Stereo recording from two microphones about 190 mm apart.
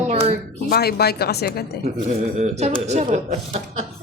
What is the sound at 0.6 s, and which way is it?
Speech, 55° left (ahead or behind).